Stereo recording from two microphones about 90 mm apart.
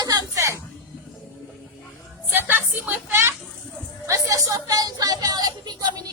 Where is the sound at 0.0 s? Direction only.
45° right (ahead or behind).